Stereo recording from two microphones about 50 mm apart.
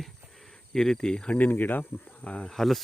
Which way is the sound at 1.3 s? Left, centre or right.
Left.